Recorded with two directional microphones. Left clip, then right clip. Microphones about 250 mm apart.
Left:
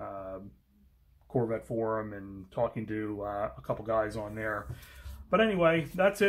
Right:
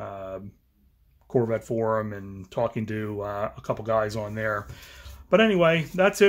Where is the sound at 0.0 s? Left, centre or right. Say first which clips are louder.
Right 5 dB; right.